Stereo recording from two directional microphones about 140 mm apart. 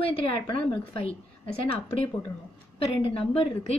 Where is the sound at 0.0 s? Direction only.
40° left (ahead or behind).